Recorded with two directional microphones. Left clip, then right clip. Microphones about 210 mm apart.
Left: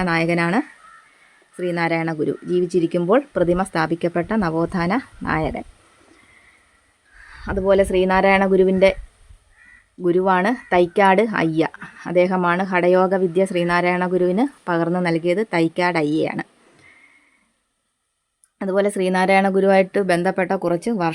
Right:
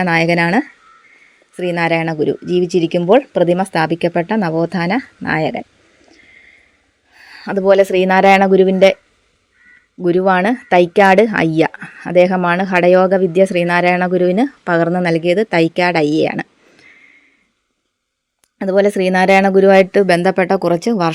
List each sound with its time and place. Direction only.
0.0 s speech: 20° right (ahead or behind)
7.4 s speech: 25° right (ahead or behind)
10.0 s speech: 20° right (ahead or behind)
18.6 s speech: 20° right (ahead or behind)